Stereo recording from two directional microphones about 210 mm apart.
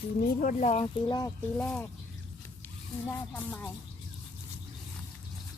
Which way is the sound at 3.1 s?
10° left (ahead or behind).